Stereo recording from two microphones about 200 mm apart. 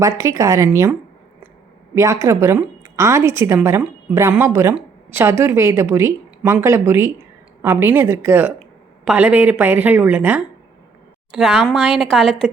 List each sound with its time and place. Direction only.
0.0 s a woman's voice: 15° right (ahead or behind)
2.0 s a woman's voice: 15° right (ahead or behind)